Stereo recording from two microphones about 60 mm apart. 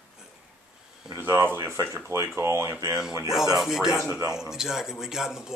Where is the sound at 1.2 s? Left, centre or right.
Right.